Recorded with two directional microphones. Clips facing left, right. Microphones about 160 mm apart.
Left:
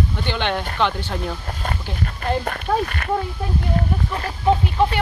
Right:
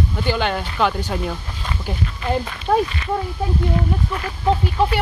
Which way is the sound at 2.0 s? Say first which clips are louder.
Left 1 dB; 50° left (ahead or behind).